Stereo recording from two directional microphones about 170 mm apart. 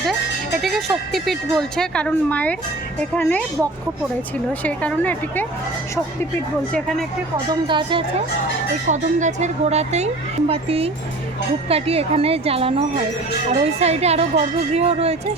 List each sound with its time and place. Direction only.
0.6 s a woman's voice: centre (ahead or behind)
6.7 s speech: centre (ahead or behind)
7.7 s a woman's voice: 30° right (ahead or behind)
8.9 s speech: 45° right (ahead or behind)